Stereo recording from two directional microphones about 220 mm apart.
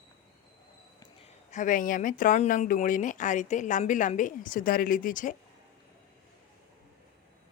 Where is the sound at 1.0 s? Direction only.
30° left (ahead or behind).